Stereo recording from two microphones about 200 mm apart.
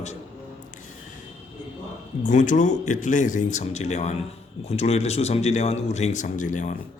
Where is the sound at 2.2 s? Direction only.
40° left (ahead or behind).